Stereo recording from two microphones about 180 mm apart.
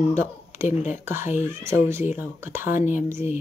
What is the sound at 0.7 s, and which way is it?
Speech, 40° left (ahead or behind).